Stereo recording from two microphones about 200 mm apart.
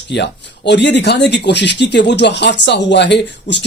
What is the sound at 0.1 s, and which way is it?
Speech, 60° left (ahead or behind).